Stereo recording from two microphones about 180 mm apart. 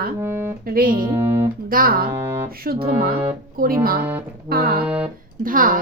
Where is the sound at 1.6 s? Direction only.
50° right (ahead or behind).